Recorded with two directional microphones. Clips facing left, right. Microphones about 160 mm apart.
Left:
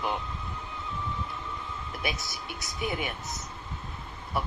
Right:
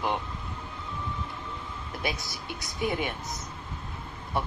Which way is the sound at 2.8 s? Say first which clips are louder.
Right 3 dB; 25° right (ahead or behind).